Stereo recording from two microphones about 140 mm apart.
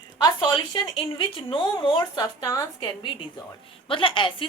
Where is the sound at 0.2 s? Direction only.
35° left (ahead or behind).